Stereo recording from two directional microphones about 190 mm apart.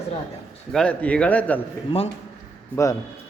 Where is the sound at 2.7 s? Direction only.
15° left (ahead or behind).